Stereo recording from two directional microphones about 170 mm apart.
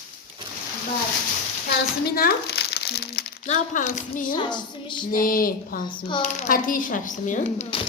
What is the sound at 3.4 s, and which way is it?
Speech, 50° left (ahead or behind).